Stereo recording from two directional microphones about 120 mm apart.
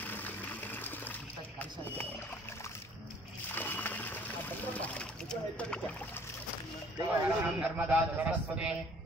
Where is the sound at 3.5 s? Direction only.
15° left (ahead or behind).